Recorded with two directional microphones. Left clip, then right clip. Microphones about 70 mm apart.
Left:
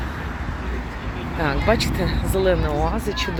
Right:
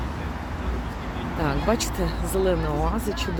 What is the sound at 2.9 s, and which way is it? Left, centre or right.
Speech, right.